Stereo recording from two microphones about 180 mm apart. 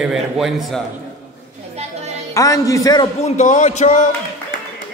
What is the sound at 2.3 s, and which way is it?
Speech, 20° left (ahead or behind).